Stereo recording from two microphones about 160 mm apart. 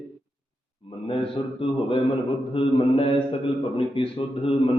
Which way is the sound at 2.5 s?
35° left (ahead or behind).